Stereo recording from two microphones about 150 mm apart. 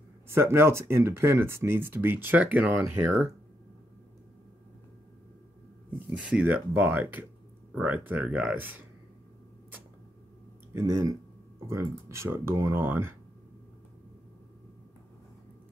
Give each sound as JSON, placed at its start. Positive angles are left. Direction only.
{"t": 0.3, "sound": "speech", "side_deg": -15}
{"t": 5.9, "sound": "speech", "side_deg": -5}
{"t": 10.7, "sound": "speech", "side_deg": -20}